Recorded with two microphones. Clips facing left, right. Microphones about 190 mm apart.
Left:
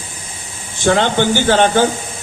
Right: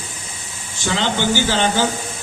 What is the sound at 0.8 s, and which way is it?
Speech, 55° left (ahead or behind).